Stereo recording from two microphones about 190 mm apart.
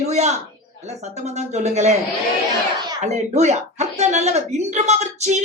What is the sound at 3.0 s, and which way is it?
Speech, 35° right (ahead or behind).